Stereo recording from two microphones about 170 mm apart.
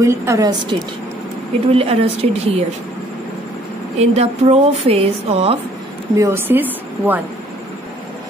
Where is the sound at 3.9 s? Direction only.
40° right (ahead or behind).